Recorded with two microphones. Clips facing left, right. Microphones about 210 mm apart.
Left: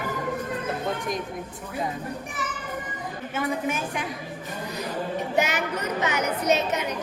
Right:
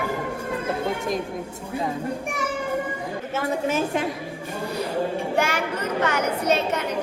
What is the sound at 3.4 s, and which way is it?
Speech, 25° right (ahead or behind).